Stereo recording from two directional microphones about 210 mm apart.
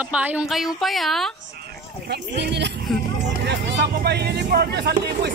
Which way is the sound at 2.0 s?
55° right (ahead or behind).